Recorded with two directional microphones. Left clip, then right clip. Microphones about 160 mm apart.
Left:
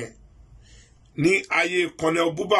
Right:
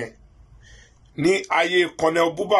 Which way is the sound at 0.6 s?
20° left (ahead or behind).